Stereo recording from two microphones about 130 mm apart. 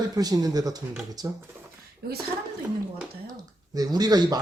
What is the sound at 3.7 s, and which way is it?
Speech, 30° right (ahead or behind).